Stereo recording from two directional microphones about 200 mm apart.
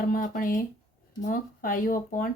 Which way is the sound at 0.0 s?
45° left (ahead or behind).